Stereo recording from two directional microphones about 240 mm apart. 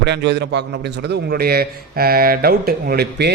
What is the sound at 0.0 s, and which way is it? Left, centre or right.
A man's voice, right.